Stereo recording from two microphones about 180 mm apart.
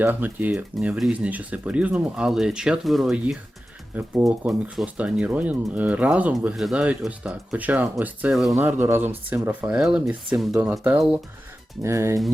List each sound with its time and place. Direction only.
0.0 s speech: 10° right (ahead or behind)
8.5 s speech: 15° right (ahead or behind)